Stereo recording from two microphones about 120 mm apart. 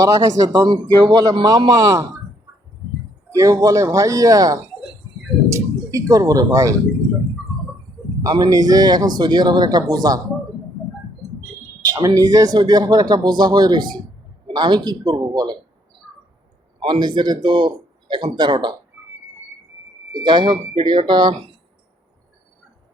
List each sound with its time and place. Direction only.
0.0 s a man's voice: 30° right (ahead or behind)
3.3 s speech: 30° right (ahead or behind)
8.2 s a man's voice: 30° right (ahead or behind)
11.9 s a man's voice: 30° right (ahead or behind)
16.8 s a man's voice: 40° right (ahead or behind)
20.1 s a man's voice: 40° right (ahead or behind)